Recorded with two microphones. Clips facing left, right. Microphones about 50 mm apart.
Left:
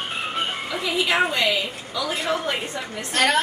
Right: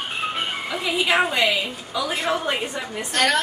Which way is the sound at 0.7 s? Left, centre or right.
Centre.